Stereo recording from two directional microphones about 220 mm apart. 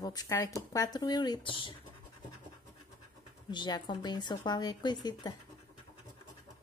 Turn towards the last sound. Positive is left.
turn(degrees=20)  # may be behind; listen again after turning